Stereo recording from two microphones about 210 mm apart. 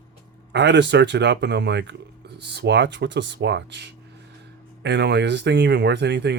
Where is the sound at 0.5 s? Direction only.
55° right (ahead or behind).